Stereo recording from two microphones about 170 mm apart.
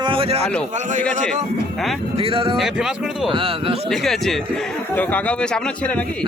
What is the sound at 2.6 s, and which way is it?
Speech, 5° right (ahead or behind).